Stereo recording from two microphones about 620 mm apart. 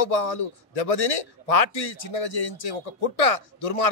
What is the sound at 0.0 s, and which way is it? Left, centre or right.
A man's voice, left.